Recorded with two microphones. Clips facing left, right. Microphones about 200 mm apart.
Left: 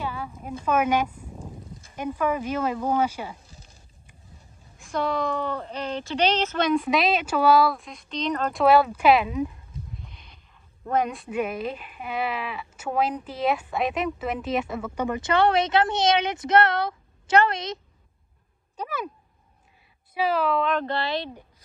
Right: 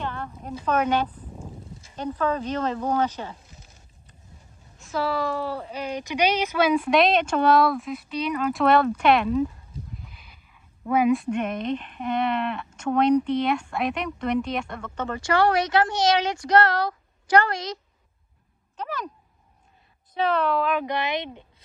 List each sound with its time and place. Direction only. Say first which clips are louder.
0.0 s a sound: even; 5° left (ahead or behind)
0.7 s speech: even; 10° left (ahead or behind)
1.5 s a sound: even; 5° right (ahead or behind)
2.0 s speech: even; 10° left (ahead or behind)
4.8 s speech: even; 5° right (ahead or behind)
8.6 s speech: left 2 dB; 5° left (ahead or behind)
9.9 s speech: even; 5° right (ahead or behind); by 17.7 s 20° left (ahead or behind)
18.8 s speech: left 1 dB; 10° left (ahead or behind)
20.2 s speech: even; 5° left (ahead or behind)
20.8 s speech: even; 15° right (ahead or behind)